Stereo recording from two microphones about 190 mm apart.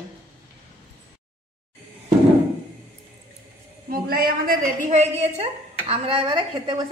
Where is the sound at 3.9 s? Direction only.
55° right (ahead or behind).